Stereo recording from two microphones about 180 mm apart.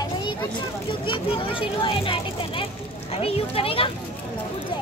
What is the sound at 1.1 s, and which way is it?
A child's voice, 30° left (ahead or behind).